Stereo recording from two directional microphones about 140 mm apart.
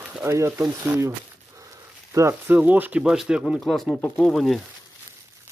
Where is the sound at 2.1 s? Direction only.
20° right (ahead or behind); by 4.0 s centre (ahead or behind).